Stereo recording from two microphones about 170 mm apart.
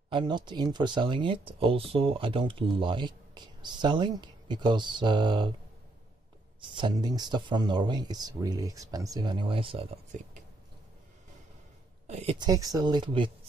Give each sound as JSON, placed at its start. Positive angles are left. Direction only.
{"t": 0.1, "sound": "speech", "side_deg": -25}
{"t": 6.8, "sound": "speech", "side_deg": -25}
{"t": 12.1, "sound": "a sound", "side_deg": -40}
{"t": 12.4, "sound": "speech", "side_deg": -20}